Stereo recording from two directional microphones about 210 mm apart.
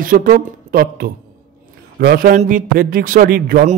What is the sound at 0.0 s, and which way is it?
Speech, 40° right (ahead or behind).